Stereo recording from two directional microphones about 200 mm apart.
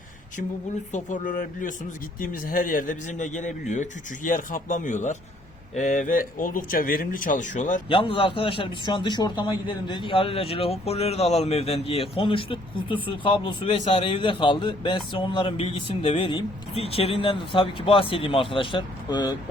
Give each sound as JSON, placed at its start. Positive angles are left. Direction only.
{"t": 0.9, "sound": "speech", "side_deg": 40}
{"t": 7.9, "sound": "a man's voice", "side_deg": 25}